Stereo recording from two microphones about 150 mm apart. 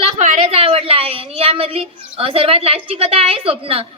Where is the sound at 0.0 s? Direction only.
45° right (ahead or behind).